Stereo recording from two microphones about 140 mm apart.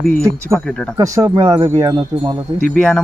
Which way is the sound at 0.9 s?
25° right (ahead or behind).